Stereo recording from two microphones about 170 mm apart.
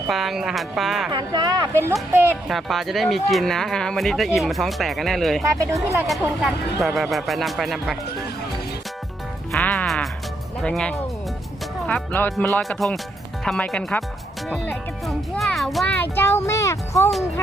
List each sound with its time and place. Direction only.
0.1 s speech: centre (ahead or behind)
1.1 s a woman's voice: 25° right (ahead or behind)
2.3 s speech: centre (ahead or behind)
5.4 s speech: 20° right (ahead or behind)
6.8 s speech: centre (ahead or behind)
9.5 s music: 5° left (ahead or behind)
10.6 s speech: 5° left (ahead or behind)
16.0 s speech: 15° left (ahead or behind)